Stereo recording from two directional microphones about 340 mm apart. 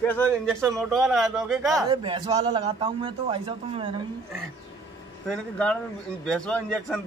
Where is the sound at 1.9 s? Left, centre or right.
Centre.